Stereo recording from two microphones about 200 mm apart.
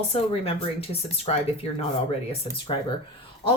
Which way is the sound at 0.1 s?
30° left (ahead or behind).